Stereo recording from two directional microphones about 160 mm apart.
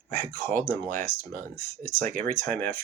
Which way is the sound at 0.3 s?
15° left (ahead or behind).